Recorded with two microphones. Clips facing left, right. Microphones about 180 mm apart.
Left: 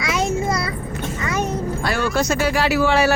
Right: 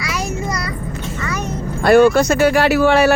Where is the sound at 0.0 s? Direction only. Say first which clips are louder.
Left 2 dB; 20° left (ahead or behind).